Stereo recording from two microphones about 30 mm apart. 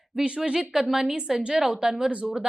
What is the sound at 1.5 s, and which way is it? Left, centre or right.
Speech, right.